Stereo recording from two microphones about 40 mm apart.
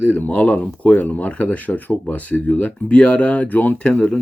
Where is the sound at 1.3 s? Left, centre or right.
Left.